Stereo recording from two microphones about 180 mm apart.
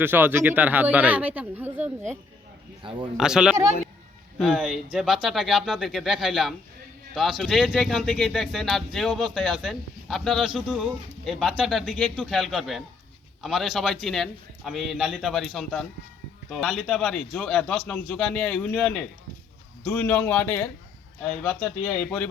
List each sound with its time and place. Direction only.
0.0 s speech: 10° right (ahead or behind)
2.8 s speech: 30° right (ahead or behind)
3.2 s speech: 5° right (ahead or behind)